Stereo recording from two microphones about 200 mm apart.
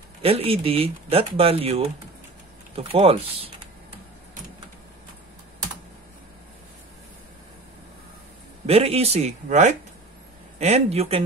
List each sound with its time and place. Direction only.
0.2 s speech: 30° right (ahead or behind)
8.6 s speech: 30° right (ahead or behind)